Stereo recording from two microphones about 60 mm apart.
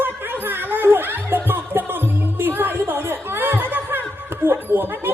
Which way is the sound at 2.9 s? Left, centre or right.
Right.